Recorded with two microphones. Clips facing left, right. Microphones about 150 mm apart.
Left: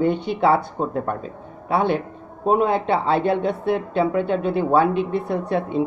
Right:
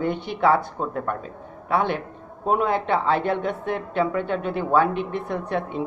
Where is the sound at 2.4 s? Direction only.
25° left (ahead or behind).